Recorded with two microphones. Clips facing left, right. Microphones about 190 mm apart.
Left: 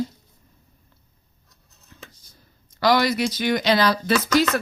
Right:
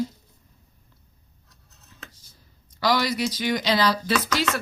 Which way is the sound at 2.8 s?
55° left (ahead or behind).